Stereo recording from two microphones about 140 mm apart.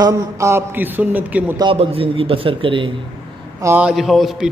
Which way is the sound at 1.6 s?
40° right (ahead or behind).